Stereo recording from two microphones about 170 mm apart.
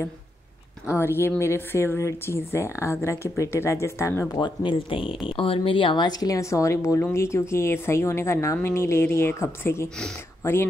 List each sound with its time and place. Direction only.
0.9 s speech: 15° left (ahead or behind)
4.4 s speech: 30° left (ahead or behind); by 10.7 s 15° left (ahead or behind)